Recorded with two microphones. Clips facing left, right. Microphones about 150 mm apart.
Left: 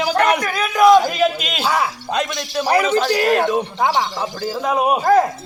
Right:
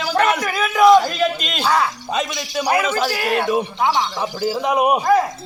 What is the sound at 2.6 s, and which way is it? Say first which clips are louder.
Speech: left 3 dB; 30° left (ahead or behind).